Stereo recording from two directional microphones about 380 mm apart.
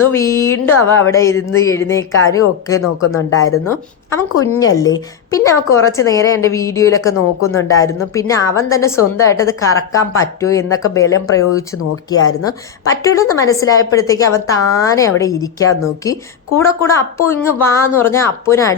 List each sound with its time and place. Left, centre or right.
0.0 s a woman's voice: centre
12.1 s speech: left
12.5 s a woman's voice: centre